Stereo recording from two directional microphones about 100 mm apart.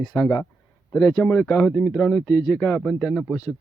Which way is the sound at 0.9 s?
35° left (ahead or behind).